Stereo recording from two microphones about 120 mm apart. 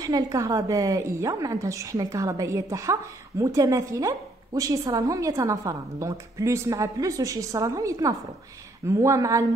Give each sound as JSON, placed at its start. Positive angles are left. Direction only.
{"t": 0.0, "sound": "a woman's voice", "side_deg": -30}